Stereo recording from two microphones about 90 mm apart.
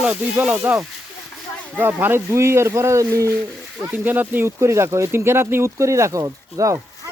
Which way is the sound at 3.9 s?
20° right (ahead or behind).